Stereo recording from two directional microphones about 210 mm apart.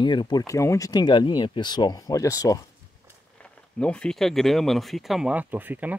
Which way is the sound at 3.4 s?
5° left (ahead or behind).